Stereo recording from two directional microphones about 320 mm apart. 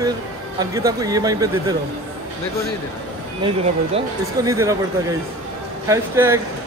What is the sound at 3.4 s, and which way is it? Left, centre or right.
Speech, centre.